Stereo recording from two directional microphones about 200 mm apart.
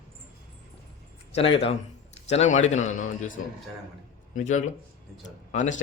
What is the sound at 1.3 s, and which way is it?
A man's voice, 30° left (ahead or behind).